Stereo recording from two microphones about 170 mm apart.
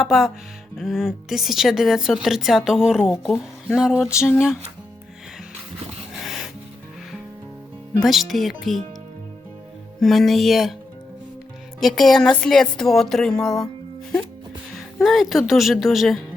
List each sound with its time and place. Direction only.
0.0 s speech: centre (ahead or behind)
3.9 s a sound: 15° left (ahead or behind)
8.0 s speech: centre (ahead or behind)
10.0 s speech: centre (ahead or behind)
11.8 s speech: centre (ahead or behind)
14.8 s speech: centre (ahead or behind)